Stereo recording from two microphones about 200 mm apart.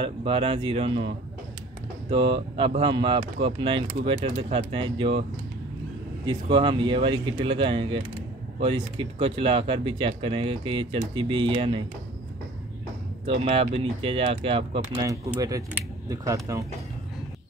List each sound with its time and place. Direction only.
0.0 s speech: 25° right (ahead or behind)
6.2 s speech: 25° right (ahead or behind)
13.3 s speech: 30° right (ahead or behind)